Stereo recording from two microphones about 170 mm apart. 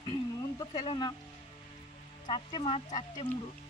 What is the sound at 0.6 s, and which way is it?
Speech, 30° left (ahead or behind).